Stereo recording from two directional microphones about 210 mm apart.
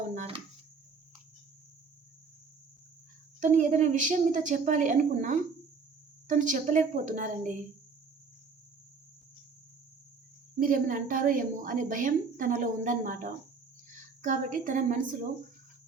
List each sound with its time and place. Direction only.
0.1 s a sound: 30° right (ahead or behind)
3.4 s a woman's voice: 35° right (ahead or behind)
10.6 s a woman's voice: 40° right (ahead or behind)